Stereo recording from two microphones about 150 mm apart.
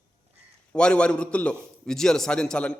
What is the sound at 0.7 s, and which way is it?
A man's voice, 5° left (ahead or behind).